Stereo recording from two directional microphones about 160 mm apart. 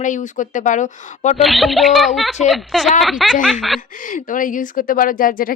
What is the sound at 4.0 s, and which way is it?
A woman's voice, 55° left (ahead or behind).